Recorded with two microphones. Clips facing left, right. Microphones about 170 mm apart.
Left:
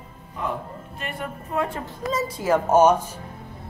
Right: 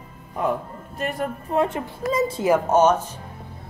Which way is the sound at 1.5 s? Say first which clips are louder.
Right 4 dB; 25° right (ahead or behind).